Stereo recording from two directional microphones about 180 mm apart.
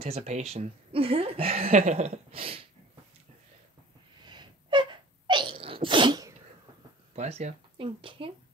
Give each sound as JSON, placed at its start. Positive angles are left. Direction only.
{"t": 0.0, "sound": "speech", "side_deg": -35}
{"t": 4.3, "sound": "sneeze", "side_deg": -25}
{"t": 7.2, "sound": "speech", "side_deg": -35}